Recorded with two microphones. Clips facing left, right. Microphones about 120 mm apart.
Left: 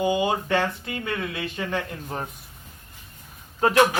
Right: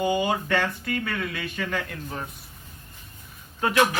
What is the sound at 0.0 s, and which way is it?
Speech, 20° left (ahead or behind).